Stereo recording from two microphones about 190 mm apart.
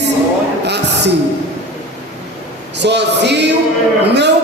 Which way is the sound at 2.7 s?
65° right (ahead or behind).